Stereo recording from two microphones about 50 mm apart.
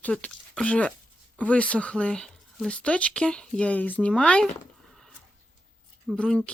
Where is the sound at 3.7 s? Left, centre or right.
Left.